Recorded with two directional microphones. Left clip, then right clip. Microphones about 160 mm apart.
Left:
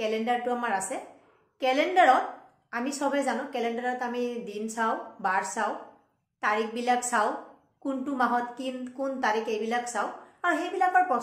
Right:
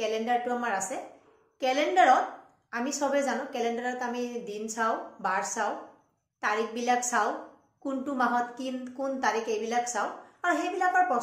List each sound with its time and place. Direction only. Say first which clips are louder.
0.0 s a woman's voice: even; 25° left (ahead or behind)